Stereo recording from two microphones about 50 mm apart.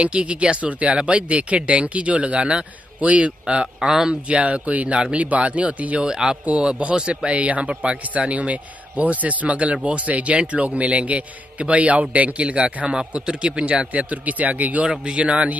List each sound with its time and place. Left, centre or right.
0.0 s a man's voice: right
5.9 s a man's voice: centre